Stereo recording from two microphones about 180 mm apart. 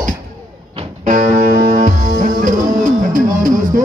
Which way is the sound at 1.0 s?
45° right (ahead or behind).